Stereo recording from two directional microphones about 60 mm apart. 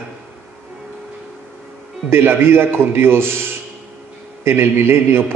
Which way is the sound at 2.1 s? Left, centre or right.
Right.